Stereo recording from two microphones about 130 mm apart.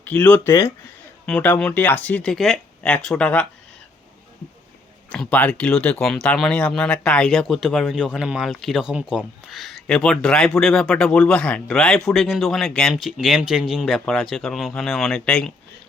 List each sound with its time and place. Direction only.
0.0 s speech: 10° left (ahead or behind)
5.0 s speech: 10° left (ahead or behind)